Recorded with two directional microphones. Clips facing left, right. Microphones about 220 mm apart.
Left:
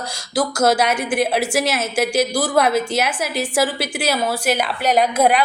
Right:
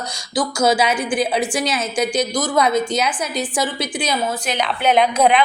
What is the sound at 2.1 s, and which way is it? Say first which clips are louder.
Speech: left 2 dB; 25° left (ahead or behind).